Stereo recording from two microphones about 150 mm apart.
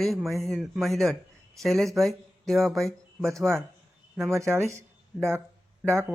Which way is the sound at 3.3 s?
15° right (ahead or behind).